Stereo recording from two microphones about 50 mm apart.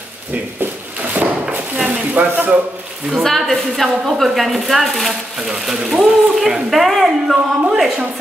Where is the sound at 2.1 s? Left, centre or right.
Right.